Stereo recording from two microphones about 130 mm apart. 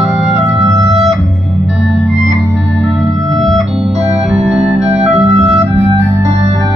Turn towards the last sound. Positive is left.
turn(degrees=-20)  # may be behind; listen again after turning